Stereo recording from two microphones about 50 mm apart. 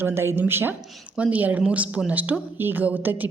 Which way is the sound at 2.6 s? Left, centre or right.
Right.